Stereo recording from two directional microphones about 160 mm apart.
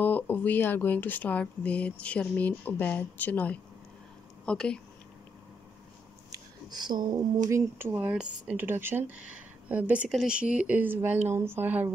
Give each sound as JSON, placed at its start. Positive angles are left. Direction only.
{"t": 0.0, "sound": "speech", "side_deg": 10}
{"t": 6.3, "sound": "a sound", "side_deg": -25}
{"t": 7.4, "sound": "speech", "side_deg": -15}